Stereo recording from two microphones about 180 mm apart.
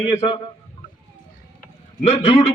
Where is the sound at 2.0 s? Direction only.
35° left (ahead or behind).